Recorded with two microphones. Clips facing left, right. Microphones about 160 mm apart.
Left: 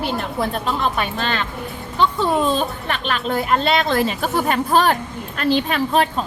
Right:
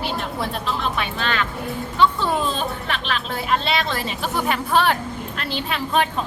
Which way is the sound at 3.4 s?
50° left (ahead or behind).